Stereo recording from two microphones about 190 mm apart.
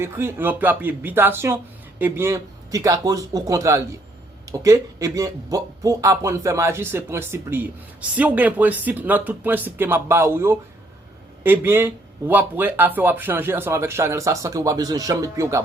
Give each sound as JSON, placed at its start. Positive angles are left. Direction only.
{"t": 0.0, "sound": "speech", "side_deg": -15}